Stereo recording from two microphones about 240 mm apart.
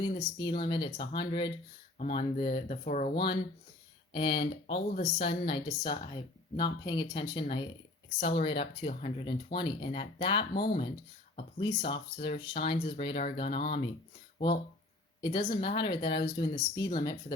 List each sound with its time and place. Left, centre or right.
0.0 s speech: centre
10.5 s speech: left
11.3 s speech: left
15.2 s speech: centre